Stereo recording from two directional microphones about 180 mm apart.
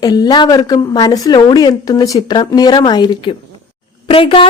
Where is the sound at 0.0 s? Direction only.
20° left (ahead or behind).